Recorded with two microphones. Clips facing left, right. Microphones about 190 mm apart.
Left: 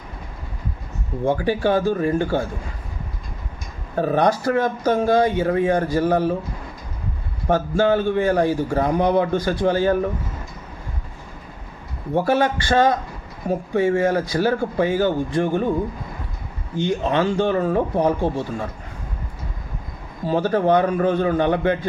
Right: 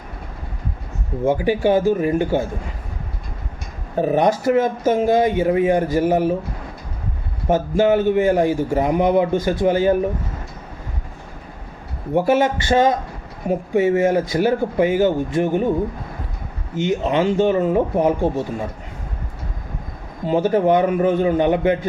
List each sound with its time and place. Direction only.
1.3 s a man's voice: 15° right (ahead or behind)
3.9 s speech: 15° right (ahead or behind)
7.4 s a man's voice: 20° right (ahead or behind)
12.1 s speech: 20° right (ahead or behind)
16.7 s speech: 20° right (ahead or behind)
20.2 s speech: 20° right (ahead or behind)